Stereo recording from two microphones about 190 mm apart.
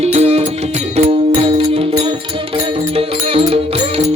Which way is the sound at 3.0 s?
30° right (ahead or behind).